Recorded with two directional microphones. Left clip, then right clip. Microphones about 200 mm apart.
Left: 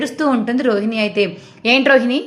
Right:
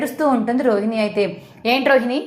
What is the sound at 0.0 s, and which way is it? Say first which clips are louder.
A woman's voice: even; 25° left (ahead or behind).